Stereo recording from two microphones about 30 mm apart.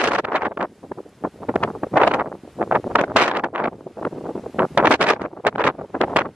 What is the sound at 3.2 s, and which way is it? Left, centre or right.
Wind noise, right.